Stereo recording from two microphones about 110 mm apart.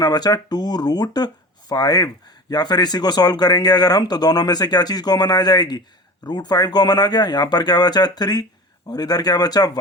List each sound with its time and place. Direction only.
0.0 s speech: 40° left (ahead or behind)